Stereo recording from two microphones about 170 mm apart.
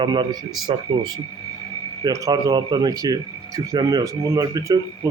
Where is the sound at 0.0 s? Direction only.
25° right (ahead or behind).